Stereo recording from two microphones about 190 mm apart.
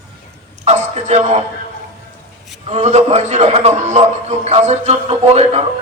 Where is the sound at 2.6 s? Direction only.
35° right (ahead or behind).